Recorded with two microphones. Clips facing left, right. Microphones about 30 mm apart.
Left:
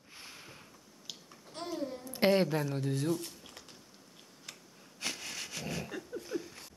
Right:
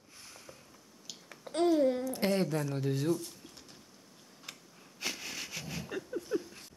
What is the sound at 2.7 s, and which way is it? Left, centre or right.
Speech, centre.